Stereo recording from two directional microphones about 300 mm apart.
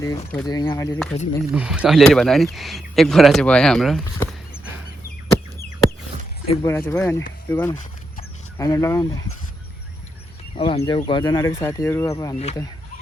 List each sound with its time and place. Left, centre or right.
0.0 s speech: centre
1.1 s speech: left
1.5 s speech: centre
6.5 s speech: centre
10.5 s speech: centre